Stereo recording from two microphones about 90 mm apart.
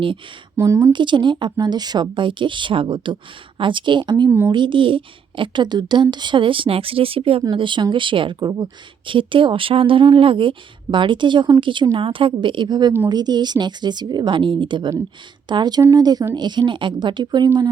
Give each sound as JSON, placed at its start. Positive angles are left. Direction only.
{"t": 0.5, "sound": "speech", "side_deg": -30}
{"t": 0.9, "sound": "speech", "side_deg": -60}
{"t": 4.3, "sound": "speech", "side_deg": -25}
{"t": 4.5, "sound": "speech", "side_deg": -65}
{"t": 7.5, "sound": "speech", "side_deg": -65}
{"t": 9.0, "sound": "speech", "side_deg": -70}
{"t": 10.9, "sound": "speech", "side_deg": -60}
{"t": 11.9, "sound": "speech", "side_deg": -75}
{"t": 15.8, "sound": "speech", "side_deg": -45}